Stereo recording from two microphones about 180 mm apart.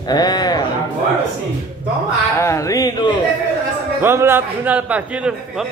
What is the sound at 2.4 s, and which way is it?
Speech, 15° left (ahead or behind).